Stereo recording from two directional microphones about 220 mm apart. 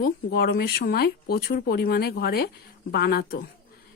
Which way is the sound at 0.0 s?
45° left (ahead or behind).